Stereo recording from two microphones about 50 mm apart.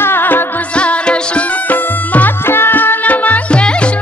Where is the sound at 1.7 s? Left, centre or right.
Left.